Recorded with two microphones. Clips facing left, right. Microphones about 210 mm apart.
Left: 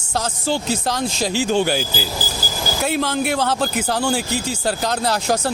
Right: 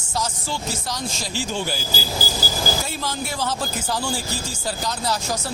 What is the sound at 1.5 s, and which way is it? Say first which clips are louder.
Speech: left 9 dB; 70° left (ahead or behind).